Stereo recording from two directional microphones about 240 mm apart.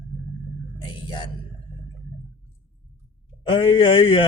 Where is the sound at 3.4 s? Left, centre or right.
Centre.